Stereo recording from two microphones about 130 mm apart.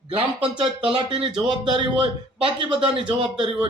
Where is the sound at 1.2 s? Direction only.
40° right (ahead or behind).